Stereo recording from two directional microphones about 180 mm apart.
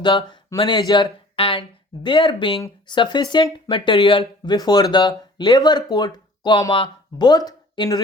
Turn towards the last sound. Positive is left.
turn(degrees=20)  # may be behind; listen again after turning